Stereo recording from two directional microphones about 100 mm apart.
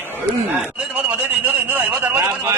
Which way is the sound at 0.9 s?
15° right (ahead or behind).